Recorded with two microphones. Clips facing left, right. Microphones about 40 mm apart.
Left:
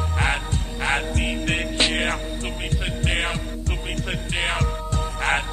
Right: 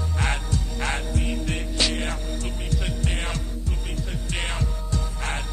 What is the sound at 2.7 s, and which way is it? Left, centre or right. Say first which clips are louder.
Music: left 3 dB; left.